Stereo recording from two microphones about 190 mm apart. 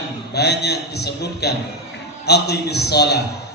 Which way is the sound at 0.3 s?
60° left (ahead or behind).